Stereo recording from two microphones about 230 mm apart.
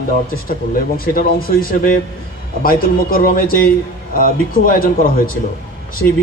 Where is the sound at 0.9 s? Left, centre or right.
Left.